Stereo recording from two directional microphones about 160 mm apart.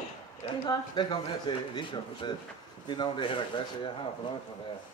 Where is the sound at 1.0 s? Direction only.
30° left (ahead or behind).